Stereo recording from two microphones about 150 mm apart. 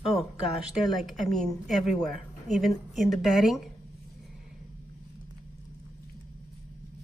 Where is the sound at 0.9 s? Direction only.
Centre (ahead or behind).